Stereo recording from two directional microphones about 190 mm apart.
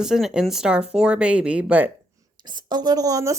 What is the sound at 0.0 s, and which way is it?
Speech, 5° right (ahead or behind).